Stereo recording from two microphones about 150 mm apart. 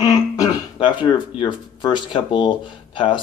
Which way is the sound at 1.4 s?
30° left (ahead or behind).